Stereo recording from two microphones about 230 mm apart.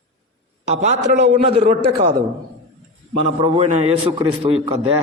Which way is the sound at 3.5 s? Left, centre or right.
Right.